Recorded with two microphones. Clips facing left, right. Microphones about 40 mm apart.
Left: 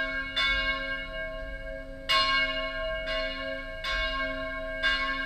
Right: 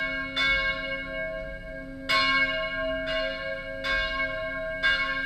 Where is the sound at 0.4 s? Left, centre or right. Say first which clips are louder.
Right 2 dB; centre.